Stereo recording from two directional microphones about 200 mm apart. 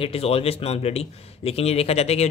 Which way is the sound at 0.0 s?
30° left (ahead or behind).